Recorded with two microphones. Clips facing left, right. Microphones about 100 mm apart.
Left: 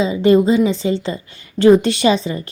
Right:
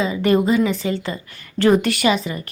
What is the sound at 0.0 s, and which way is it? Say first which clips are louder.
A woman's voice: left 5 dB; 25° left (ahead or behind).